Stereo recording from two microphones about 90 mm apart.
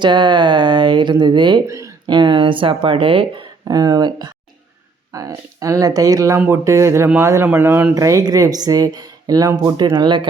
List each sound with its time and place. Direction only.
0.0 s speech: 55° right (ahead or behind)
1.6 s speech: 35° right (ahead or behind)
2.0 s speech: 60° right (ahead or behind)
3.7 s speech: 45° right (ahead or behind)
5.1 s speech: 40° right (ahead or behind); by 7.9 s 25° right (ahead or behind)
7.9 s speech: 35° right (ahead or behind); by 10.2 s 55° right (ahead or behind)